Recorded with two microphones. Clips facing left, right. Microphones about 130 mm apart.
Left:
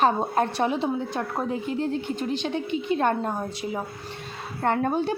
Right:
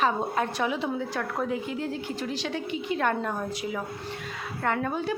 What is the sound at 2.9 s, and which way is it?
A woman's voice, 30° left (ahead or behind).